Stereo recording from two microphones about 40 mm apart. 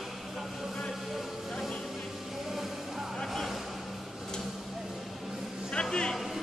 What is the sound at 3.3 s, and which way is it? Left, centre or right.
Vehicle, centre.